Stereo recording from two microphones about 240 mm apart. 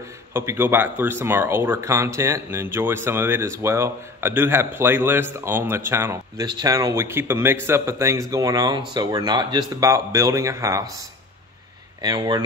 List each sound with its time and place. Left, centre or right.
0.3 s speech: centre
12.0 s speech: centre